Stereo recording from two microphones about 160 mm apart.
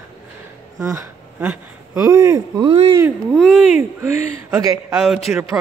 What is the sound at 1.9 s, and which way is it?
Speech, 25° right (ahead or behind).